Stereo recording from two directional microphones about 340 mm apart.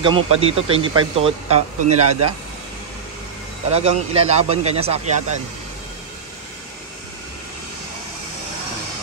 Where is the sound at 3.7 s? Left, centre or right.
Centre.